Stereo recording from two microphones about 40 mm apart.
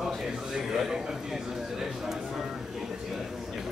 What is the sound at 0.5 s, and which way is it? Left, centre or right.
Speech, centre.